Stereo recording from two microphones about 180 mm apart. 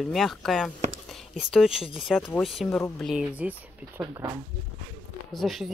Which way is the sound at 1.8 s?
30° left (ahead or behind).